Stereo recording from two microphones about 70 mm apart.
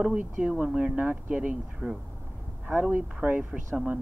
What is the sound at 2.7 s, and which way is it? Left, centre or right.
Speech, centre.